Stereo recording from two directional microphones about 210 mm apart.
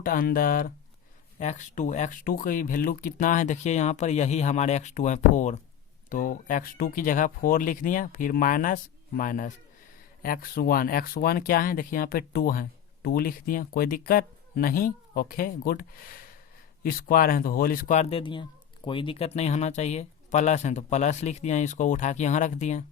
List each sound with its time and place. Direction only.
0.0 s speech: 45° left (ahead or behind)